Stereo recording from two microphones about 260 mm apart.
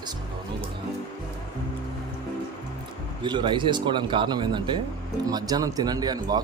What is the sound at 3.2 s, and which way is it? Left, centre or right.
Speech, centre.